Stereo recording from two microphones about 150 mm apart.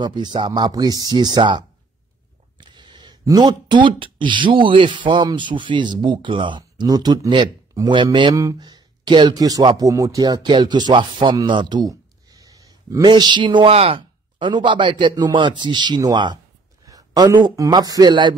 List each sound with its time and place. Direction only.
0.0 s a man's voice: 30° right (ahead or behind)